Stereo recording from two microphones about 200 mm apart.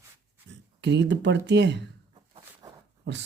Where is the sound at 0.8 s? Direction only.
60° right (ahead or behind).